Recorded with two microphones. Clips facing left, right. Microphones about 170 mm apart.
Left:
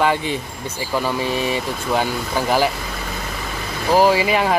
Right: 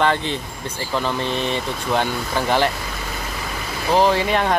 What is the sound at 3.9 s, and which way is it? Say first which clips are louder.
Speech: left 2 dB; 10° left (ahead or behind).